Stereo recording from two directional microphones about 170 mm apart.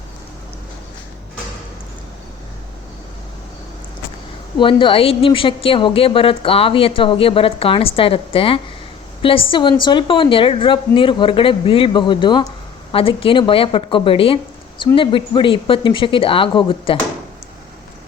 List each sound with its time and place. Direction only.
4.5 s a woman's voice: 30° left (ahead or behind)